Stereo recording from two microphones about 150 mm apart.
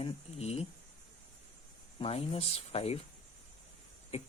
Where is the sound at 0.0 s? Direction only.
40° left (ahead or behind).